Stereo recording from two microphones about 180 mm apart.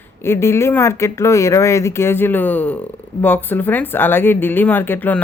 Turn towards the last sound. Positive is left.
turn(degrees=10)  # may be behind; listen again after turning